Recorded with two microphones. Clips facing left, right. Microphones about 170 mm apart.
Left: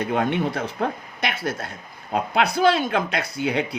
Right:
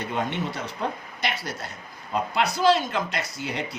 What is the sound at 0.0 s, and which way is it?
Speech, 55° left (ahead or behind).